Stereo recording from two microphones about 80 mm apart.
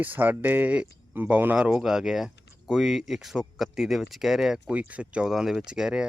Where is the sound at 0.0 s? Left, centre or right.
Right.